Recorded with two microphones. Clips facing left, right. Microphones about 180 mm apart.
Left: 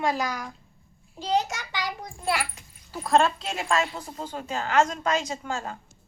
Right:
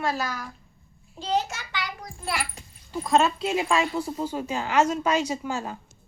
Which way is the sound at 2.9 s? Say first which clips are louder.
Even; centre (ahead or behind).